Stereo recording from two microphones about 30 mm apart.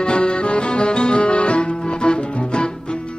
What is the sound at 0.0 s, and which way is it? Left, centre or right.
Music, left.